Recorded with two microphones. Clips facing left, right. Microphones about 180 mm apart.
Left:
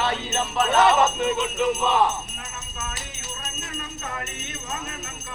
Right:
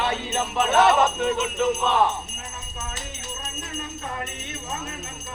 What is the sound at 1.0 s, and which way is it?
Jingle bell, 5° left (ahead or behind).